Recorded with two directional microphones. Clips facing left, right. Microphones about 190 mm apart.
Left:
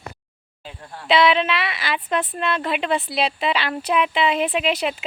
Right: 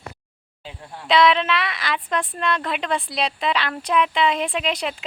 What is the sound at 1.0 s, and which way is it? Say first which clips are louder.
Speech: even; 5° left (ahead or behind).